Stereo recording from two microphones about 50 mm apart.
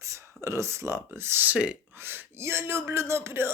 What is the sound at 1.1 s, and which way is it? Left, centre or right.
Speech, right.